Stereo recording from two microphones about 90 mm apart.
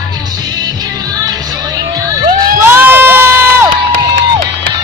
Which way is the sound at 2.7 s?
25° right (ahead or behind).